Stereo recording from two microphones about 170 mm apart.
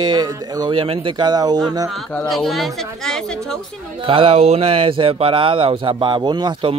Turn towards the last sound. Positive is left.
turn(degrees=-30)  # may be behind; listen again after turning